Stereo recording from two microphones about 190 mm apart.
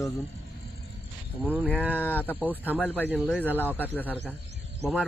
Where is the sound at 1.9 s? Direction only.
10° left (ahead or behind).